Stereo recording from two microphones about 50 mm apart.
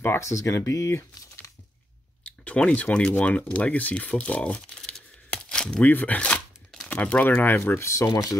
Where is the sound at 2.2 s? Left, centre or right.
Left.